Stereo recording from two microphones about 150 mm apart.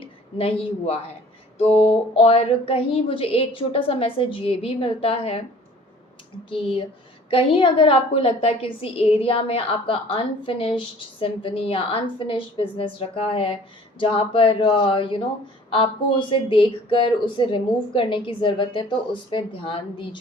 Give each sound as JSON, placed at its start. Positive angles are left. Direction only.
{"t": 0.0, "sound": "a woman's voice", "side_deg": 40}
{"t": 6.5, "sound": "a woman's voice", "side_deg": 35}